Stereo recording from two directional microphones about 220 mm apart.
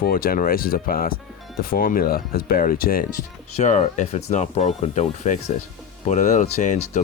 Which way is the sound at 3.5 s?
30° left (ahead or behind).